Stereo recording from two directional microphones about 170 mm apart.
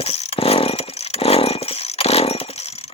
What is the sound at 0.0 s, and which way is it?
Chainsaw, 35° left (ahead or behind).